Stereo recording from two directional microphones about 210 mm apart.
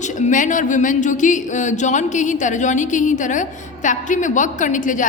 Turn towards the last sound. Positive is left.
turn(degrees=35)  # may be behind; listen again after turning